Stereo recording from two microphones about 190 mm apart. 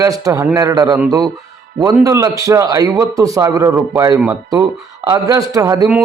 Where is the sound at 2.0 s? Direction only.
15° right (ahead or behind).